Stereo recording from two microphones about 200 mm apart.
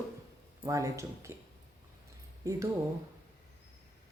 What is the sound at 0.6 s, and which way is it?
Speech, 15° right (ahead or behind).